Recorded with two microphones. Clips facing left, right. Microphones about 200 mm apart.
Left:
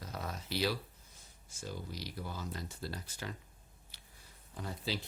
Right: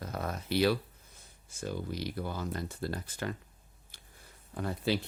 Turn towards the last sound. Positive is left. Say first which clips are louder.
# right 8 dB
turn(degrees=-60)  # may be behind; listen again after turning